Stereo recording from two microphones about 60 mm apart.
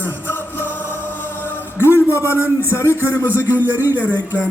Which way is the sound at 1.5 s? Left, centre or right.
Left.